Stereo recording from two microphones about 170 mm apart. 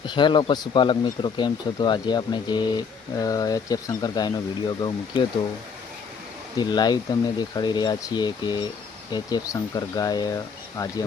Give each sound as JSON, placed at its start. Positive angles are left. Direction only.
{"t": 0.0, "sound": "speech", "side_deg": 25}
{"t": 6.6, "sound": "speech", "side_deg": 25}